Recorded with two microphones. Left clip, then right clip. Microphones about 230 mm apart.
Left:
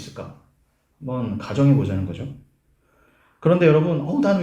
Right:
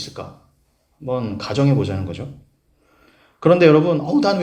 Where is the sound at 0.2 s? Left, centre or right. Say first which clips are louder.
Right 3 dB; right.